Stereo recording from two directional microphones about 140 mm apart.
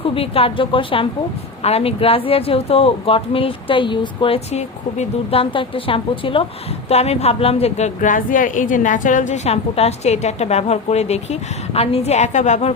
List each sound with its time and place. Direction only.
0.0 s speech: 40° left (ahead or behind)
4.5 s a woman's voice: 45° left (ahead or behind)